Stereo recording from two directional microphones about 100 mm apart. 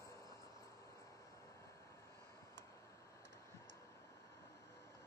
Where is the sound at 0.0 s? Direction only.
35° left (ahead or behind).